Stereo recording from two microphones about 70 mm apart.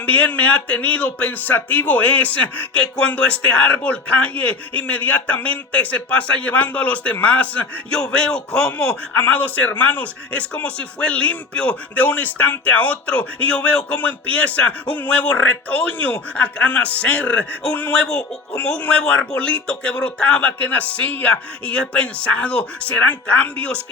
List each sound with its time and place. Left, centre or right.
0.0 s speech: left